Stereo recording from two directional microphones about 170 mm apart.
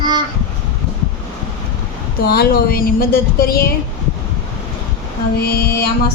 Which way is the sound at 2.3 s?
65° left (ahead or behind).